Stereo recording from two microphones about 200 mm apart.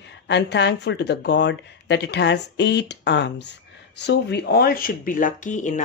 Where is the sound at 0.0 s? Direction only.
60° left (ahead or behind).